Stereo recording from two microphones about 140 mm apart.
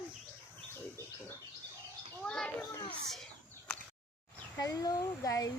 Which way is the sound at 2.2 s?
5° left (ahead or behind).